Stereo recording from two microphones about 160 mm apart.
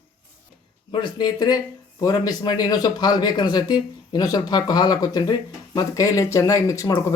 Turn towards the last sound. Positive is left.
turn(degrees=20)  # may be behind; listen again after turning